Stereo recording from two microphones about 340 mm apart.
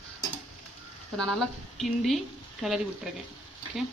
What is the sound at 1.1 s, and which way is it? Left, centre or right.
Speech, centre.